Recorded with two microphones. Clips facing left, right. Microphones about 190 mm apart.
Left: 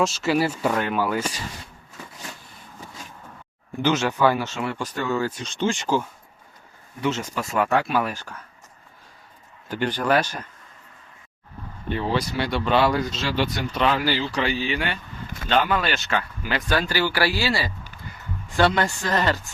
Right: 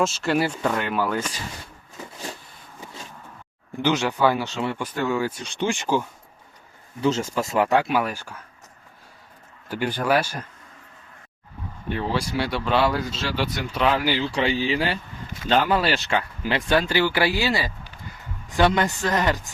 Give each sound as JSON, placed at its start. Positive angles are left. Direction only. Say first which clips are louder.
{"t": 0.0, "sound": "speech", "louder": "left 1 dB", "side_deg": 0}
{"t": 3.8, "sound": "speech", "louder": "even", "side_deg": -15}
{"t": 7.0, "sound": "speech", "louder": "right 3 dB", "side_deg": -30}
{"t": 9.6, "sound": "speech", "louder": "even", "side_deg": -10}
{"t": 11.9, "sound": "speech", "louder": "left 1 dB", "side_deg": -5}
{"t": 14.3, "sound": "speech", "louder": "right 2 dB", "side_deg": -25}